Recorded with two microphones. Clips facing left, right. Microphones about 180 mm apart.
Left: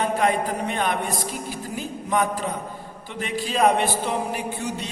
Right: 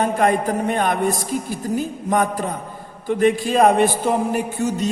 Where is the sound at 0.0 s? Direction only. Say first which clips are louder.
Right 4 dB; 45° right (ahead or behind).